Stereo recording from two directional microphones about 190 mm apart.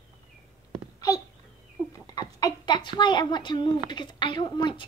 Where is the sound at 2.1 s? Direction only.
20° left (ahead or behind).